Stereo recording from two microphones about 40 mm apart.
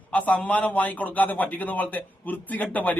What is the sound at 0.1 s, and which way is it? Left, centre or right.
A man's voice, left.